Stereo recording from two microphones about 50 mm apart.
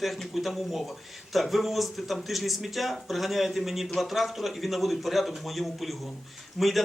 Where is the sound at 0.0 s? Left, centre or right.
Centre.